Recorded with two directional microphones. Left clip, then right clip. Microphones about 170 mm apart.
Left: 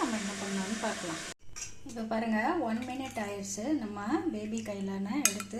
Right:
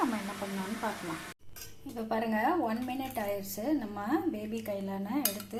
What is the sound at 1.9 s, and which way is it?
A woman's voice, centre (ahead or behind).